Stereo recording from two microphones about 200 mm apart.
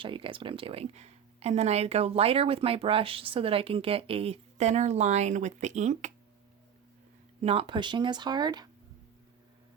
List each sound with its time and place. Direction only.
0.0 s speech: 25° right (ahead or behind)
7.4 s speech: 25° right (ahead or behind)